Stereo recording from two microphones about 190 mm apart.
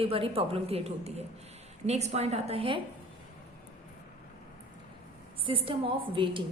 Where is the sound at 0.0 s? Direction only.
30° right (ahead or behind).